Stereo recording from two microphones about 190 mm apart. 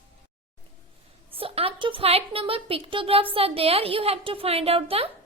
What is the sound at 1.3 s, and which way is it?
A woman's voice, 30° right (ahead or behind).